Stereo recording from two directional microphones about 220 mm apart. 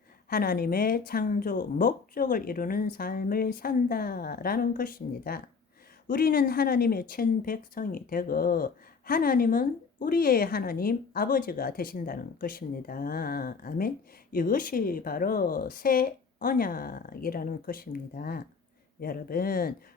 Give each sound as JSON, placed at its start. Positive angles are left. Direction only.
{"t": 0.3, "sound": "speech", "side_deg": 40}